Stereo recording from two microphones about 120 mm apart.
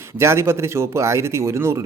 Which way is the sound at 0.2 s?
20° right (ahead or behind).